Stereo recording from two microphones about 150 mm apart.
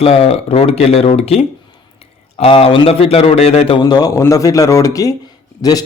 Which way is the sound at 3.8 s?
25° left (ahead or behind).